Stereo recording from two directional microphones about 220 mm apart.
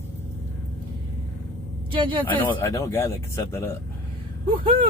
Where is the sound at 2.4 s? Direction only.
10° left (ahead or behind).